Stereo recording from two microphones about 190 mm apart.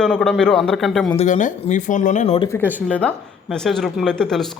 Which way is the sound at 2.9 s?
5° left (ahead or behind).